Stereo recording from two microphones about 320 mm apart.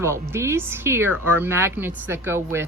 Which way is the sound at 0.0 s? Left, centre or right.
Centre.